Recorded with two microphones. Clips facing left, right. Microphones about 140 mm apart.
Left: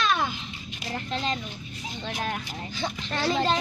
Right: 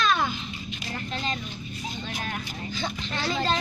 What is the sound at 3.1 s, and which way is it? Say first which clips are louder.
Speech: left 4 dB; 40° left (ahead or behind).